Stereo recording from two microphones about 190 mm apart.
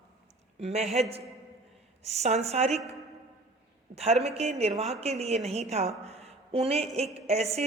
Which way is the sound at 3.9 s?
55° right (ahead or behind).